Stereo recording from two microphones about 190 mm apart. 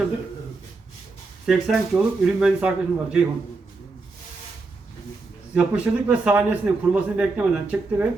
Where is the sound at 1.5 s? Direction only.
Centre (ahead or behind).